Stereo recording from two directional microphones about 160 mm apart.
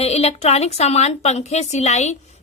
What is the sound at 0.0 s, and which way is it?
A woman's voice, 40° left (ahead or behind).